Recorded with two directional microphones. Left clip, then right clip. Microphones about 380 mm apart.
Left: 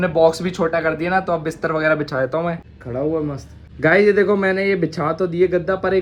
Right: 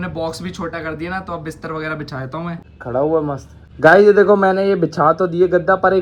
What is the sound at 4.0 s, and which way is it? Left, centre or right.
Speech, centre.